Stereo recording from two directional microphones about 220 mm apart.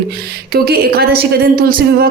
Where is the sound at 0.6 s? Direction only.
45° right (ahead or behind).